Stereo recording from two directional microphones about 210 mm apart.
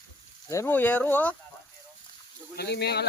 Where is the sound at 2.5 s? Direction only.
50° left (ahead or behind).